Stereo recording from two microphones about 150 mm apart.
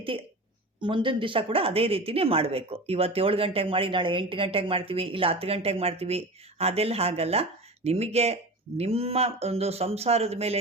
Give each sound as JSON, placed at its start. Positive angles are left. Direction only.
{"t": 0.1, "sound": "speech", "side_deg": -35}